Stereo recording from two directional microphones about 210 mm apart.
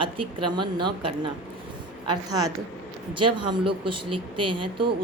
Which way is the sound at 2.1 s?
20° right (ahead or behind).